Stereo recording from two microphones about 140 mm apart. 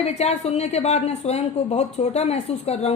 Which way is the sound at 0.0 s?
50° left (ahead or behind).